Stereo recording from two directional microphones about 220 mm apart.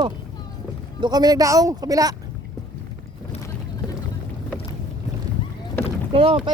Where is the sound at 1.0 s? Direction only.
15° right (ahead or behind).